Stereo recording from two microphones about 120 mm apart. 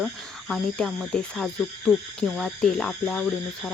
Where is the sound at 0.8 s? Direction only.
5° left (ahead or behind).